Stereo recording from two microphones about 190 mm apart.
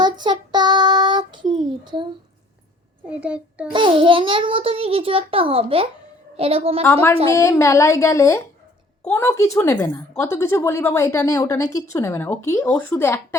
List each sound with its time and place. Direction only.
0.0 s child singing: 25° right (ahead or behind)
1.8 s a child's voice: 25° right (ahead or behind)
3.1 s a child's voice: 5° right (ahead or behind)
3.7 s a child's voice: 25° right (ahead or behind)
6.8 s a woman's voice: 10° left (ahead or behind)